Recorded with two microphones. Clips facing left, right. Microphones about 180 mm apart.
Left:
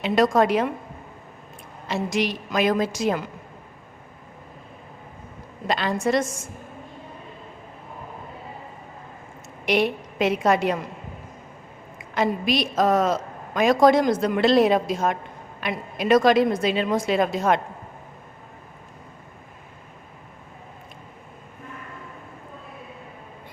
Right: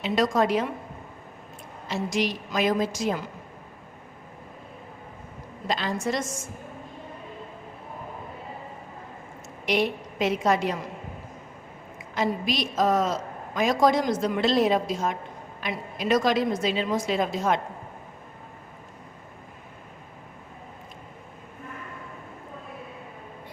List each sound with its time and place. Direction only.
0.0 s a woman's voice: 60° left (ahead or behind)
1.9 s a woman's voice: 65° left (ahead or behind)
5.6 s a woman's voice: 65° left (ahead or behind)
9.6 s a woman's voice: 65° left (ahead or behind)
12.1 s a woman's voice: 65° left (ahead or behind)